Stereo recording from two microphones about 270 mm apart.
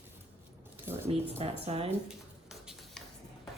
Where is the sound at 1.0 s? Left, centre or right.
Right.